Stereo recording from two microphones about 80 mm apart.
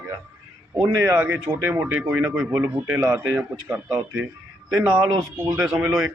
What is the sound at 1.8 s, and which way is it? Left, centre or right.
Speech, centre.